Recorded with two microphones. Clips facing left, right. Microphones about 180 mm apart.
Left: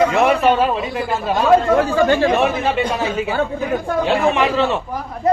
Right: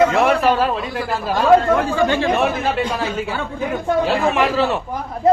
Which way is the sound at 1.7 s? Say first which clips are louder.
Left 2 dB; 40° left (ahead or behind).